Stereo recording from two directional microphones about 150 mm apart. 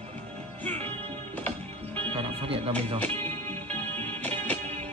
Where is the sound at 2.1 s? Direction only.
40° right (ahead or behind).